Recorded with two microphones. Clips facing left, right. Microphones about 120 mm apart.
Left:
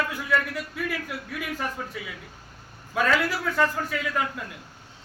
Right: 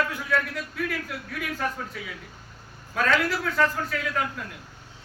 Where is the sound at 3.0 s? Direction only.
5° left (ahead or behind).